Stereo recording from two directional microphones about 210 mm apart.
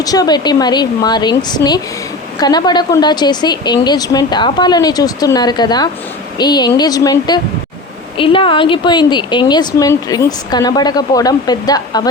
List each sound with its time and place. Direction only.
0.0 s speech: 15° left (ahead or behind)